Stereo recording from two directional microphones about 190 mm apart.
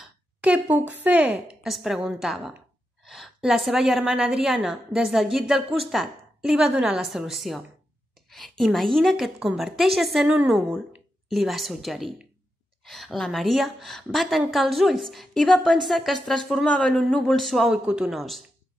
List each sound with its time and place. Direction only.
0.4 s a woman's voice: 5° right (ahead or behind)